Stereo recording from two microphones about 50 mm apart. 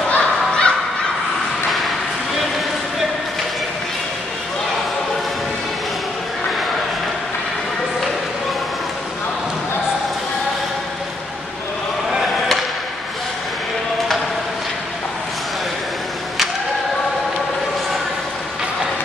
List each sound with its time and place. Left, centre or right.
0.1 s honk: left